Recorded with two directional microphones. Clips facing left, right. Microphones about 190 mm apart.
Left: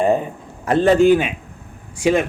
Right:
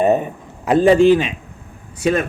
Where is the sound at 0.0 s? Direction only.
20° right (ahead or behind).